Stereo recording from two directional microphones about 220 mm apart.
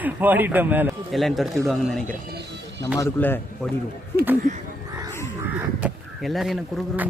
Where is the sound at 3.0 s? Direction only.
10° left (ahead or behind).